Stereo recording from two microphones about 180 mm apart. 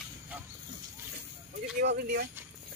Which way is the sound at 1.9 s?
65° right (ahead or behind).